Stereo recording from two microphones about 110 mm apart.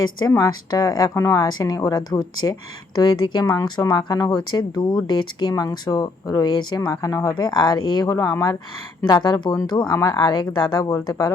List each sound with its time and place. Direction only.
0.3 s speech: 35° left (ahead or behind)